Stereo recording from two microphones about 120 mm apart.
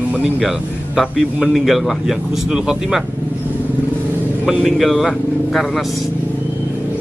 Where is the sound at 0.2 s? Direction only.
Centre (ahead or behind).